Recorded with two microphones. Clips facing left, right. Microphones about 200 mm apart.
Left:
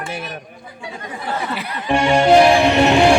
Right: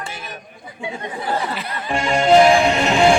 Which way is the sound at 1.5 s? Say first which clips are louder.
Left 1 dB; 10° left (ahead or behind).